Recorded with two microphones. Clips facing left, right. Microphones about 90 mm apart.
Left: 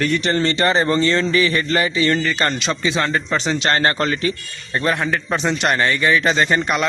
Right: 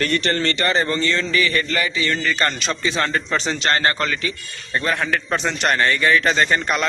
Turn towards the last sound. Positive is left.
turn(degrees=10)  # may be behind; listen again after turning